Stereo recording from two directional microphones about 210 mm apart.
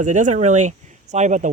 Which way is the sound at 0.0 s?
35° right (ahead or behind).